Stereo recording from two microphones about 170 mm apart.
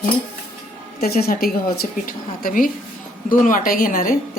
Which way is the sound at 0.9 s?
65° left (ahead or behind).